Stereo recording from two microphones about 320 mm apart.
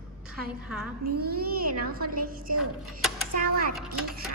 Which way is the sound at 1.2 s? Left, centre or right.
Right.